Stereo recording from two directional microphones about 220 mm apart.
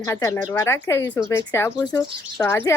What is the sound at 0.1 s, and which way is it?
Speech, 10° left (ahead or behind).